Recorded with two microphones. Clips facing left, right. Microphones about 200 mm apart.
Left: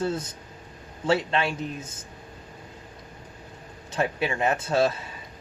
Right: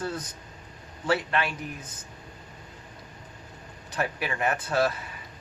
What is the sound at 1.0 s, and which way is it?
Speech, 25° left (ahead or behind).